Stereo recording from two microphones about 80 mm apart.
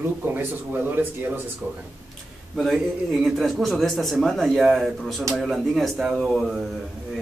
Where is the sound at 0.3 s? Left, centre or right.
Right.